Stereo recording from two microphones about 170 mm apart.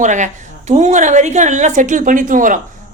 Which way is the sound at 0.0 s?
45° right (ahead or behind).